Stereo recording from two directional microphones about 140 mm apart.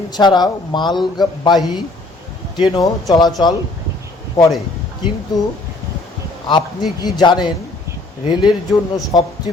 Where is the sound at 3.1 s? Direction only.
30° left (ahead or behind).